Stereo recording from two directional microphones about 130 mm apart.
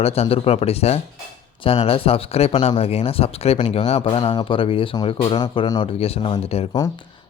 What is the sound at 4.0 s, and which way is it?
Speech, 40° left (ahead or behind).